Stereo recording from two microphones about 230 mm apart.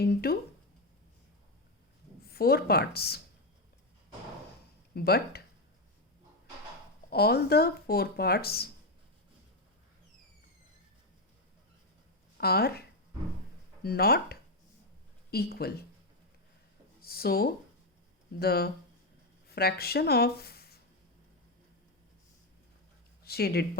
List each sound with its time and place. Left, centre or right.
0.0 s speech: left
2.2 s speech: left
4.9 s speech: left
7.1 s speech: left
12.4 s speech: left
13.8 s speech: left
17.0 s a sound: left
18.3 s speech: left
23.2 s speech: left